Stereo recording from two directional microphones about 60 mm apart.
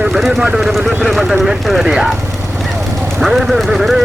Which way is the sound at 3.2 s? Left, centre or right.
Centre.